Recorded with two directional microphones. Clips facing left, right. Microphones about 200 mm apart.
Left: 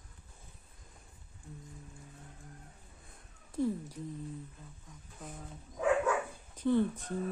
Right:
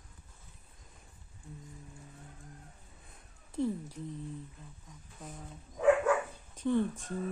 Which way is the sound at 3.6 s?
30° right (ahead or behind).